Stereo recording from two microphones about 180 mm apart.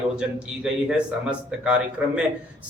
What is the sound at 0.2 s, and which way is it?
A man's voice, 5° right (ahead or behind).